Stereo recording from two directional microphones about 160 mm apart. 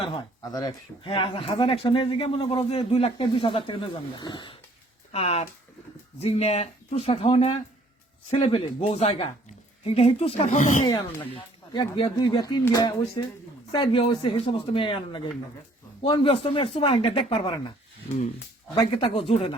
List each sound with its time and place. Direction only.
0.1 s speech: 25° left (ahead or behind)
5.1 s speech: 40° left (ahead or behind)
10.8 s speech: 25° left (ahead or behind)
18.7 s speech: 35° left (ahead or behind)